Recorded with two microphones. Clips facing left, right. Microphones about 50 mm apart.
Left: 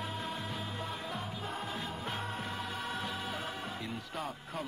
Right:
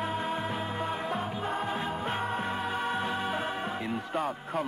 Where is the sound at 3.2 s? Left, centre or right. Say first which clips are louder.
Right 7 dB; right.